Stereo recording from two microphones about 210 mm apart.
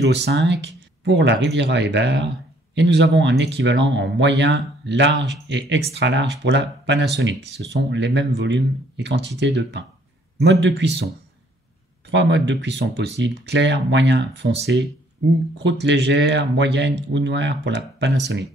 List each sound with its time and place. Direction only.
0.0 s speech: 55° right (ahead or behind)
12.1 s speech: 60° right (ahead or behind)